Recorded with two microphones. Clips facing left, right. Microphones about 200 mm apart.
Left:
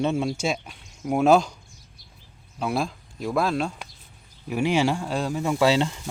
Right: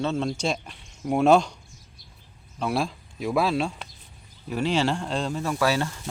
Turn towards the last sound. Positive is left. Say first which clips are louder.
# left 4 dB
turn(degrees=20)  # may be behind; listen again after turning